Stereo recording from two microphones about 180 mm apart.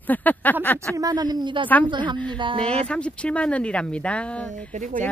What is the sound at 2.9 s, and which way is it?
Speech, 5° left (ahead or behind).